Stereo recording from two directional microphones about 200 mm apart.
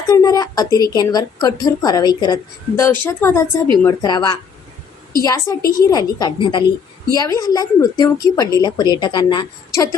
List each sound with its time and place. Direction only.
0.1 s a woman's voice: 15° left (ahead or behind)